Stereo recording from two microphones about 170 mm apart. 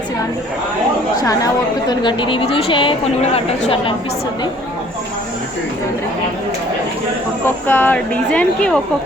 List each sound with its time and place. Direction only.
1.1 s chatter: 20° left (ahead or behind)
1.9 s a woman's voice: 25° left (ahead or behind)
7.4 s speech: 10° left (ahead or behind)